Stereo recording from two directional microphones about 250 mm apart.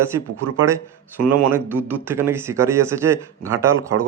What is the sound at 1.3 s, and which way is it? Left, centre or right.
A man's voice, centre.